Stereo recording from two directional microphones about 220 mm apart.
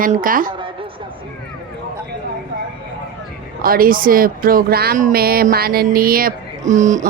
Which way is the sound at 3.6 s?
40° right (ahead or behind).